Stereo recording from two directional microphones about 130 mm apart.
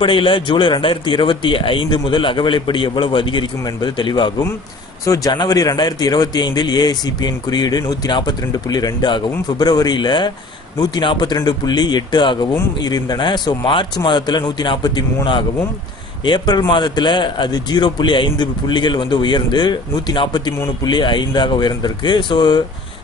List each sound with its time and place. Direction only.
0.0 s speech: 40° left (ahead or behind)